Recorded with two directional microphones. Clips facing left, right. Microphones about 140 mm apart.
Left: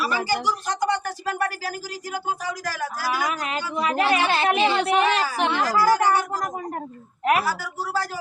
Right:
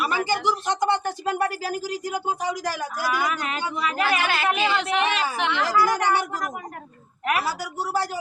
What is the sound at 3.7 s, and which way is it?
Speech, 25° left (ahead or behind).